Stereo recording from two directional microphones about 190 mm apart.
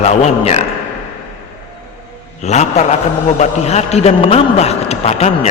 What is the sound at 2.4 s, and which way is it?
A man's voice, 35° left (ahead or behind).